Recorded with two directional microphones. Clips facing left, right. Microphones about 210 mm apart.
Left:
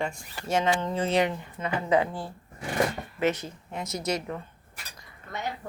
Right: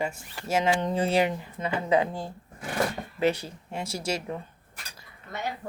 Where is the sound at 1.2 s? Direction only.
30° right (ahead or behind).